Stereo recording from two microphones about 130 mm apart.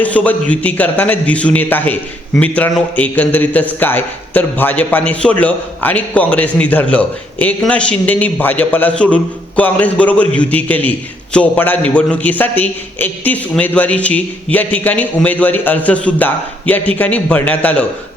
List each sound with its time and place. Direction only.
0.0 s a man's voice: 10° left (ahead or behind)